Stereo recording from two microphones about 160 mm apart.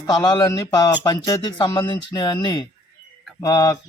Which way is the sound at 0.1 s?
25° left (ahead or behind).